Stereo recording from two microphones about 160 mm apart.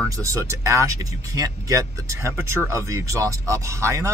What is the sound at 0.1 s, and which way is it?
Speech, 20° right (ahead or behind).